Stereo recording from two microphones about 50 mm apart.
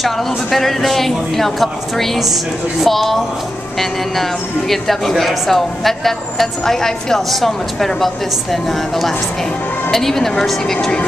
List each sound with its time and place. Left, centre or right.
0.0 s speech: centre
4.2 s a woman's voice: centre